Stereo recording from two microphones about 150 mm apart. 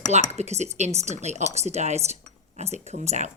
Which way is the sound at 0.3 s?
45° right (ahead or behind).